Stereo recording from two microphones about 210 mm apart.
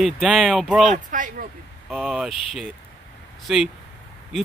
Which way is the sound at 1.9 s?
5° right (ahead or behind).